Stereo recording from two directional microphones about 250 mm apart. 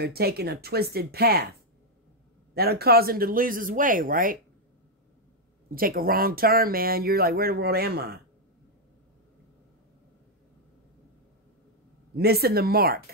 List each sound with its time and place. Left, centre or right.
0.0 s speech: right
2.5 s speech: right
5.8 s speech: right
12.2 s speech: right